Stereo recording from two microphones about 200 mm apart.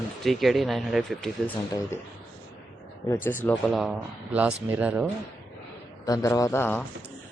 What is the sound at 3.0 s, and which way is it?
Speech, 10° left (ahead or behind).